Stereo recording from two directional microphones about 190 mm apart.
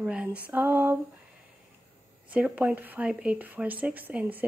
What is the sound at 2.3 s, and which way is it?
A woman's voice, 10° right (ahead or behind).